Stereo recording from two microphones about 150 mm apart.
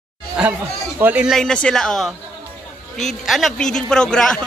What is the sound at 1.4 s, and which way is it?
Speech, 5° left (ahead or behind).